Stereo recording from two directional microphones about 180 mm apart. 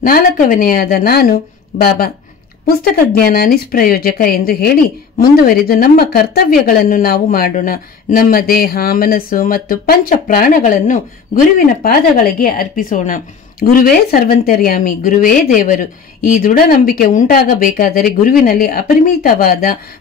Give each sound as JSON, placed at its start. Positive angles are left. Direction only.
{"t": 0.0, "sound": "speech", "side_deg": 50}